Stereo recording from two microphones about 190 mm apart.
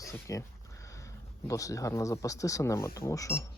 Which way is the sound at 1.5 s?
15° left (ahead or behind).